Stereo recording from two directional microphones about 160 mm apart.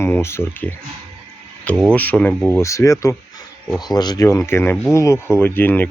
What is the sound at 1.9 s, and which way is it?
Speech, 10° left (ahead or behind).